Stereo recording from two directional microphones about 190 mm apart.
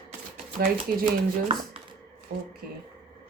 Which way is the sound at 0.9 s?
55° right (ahead or behind).